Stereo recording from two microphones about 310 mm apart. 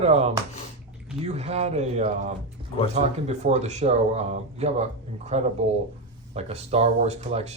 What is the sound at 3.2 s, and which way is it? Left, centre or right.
Speech, right.